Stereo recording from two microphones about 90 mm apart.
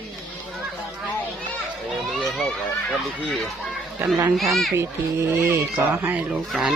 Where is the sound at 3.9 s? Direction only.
25° right (ahead or behind).